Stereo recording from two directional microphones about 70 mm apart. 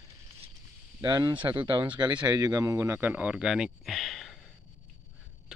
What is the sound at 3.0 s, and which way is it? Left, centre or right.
Speech, right.